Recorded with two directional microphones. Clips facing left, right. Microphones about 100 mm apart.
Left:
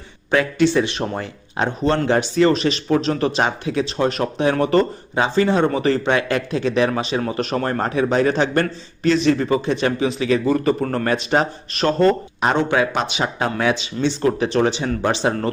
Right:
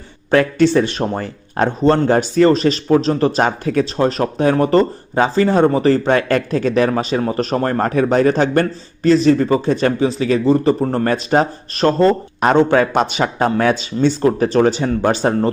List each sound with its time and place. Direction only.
0.3 s speech: 45° right (ahead or behind); by 11.0 s 30° right (ahead or behind)
11.0 s speech: 40° right (ahead or behind)